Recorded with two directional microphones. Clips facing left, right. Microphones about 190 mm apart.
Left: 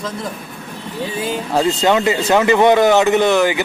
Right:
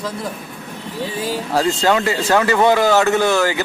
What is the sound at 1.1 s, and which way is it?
Speech, 20° left (ahead or behind).